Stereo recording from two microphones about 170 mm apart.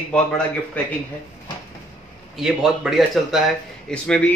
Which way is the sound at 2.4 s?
Centre (ahead or behind).